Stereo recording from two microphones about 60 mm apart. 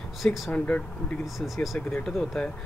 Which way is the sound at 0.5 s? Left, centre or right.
Left.